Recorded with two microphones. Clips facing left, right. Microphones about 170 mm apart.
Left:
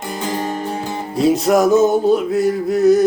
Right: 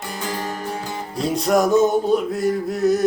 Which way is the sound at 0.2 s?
20° left (ahead or behind).